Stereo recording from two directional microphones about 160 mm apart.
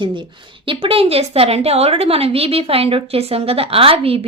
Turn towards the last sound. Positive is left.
turn(degrees=-35)  # may be behind; listen again after turning